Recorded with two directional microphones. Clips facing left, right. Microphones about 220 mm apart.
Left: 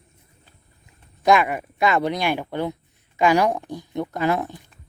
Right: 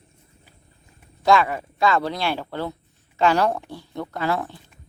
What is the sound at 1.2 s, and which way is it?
Speech, 15° left (ahead or behind).